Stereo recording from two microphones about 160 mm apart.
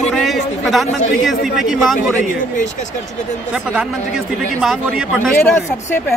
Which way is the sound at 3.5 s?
5° right (ahead or behind).